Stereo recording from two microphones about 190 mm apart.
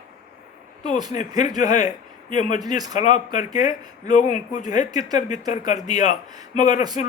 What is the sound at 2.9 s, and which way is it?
Speech, 40° left (ahead or behind).